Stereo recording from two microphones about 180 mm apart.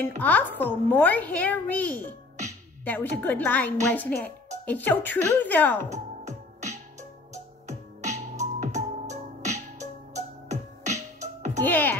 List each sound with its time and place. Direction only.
0.2 s a child's voice: 10° left (ahead or behind)
5.9 s music: 40° right (ahead or behind)
11.6 s a child's voice: 10° left (ahead or behind)